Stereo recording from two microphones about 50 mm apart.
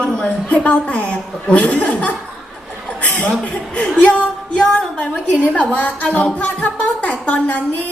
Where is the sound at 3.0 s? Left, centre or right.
Left.